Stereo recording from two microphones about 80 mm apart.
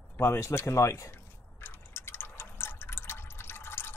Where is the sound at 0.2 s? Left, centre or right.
Left.